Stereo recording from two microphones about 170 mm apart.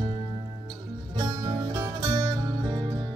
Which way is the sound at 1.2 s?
25° right (ahead or behind).